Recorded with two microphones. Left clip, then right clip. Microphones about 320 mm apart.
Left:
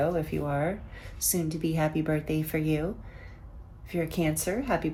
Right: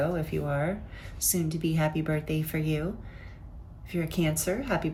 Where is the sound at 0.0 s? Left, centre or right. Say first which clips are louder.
Left 2 dB; centre.